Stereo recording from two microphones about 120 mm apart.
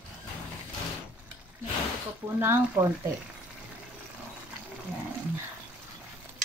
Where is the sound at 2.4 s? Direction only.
20° right (ahead or behind).